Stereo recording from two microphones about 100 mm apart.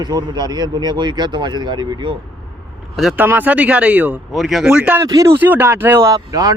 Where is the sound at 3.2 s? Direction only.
20° right (ahead or behind).